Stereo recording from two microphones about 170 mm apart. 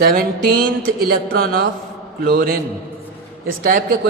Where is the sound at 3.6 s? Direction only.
55° right (ahead or behind).